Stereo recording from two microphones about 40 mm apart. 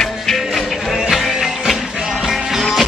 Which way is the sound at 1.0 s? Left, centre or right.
Centre.